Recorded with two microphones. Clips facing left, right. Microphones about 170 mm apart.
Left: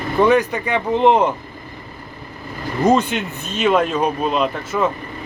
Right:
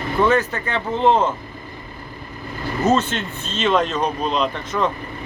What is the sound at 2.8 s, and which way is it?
Speech, 15° left (ahead or behind).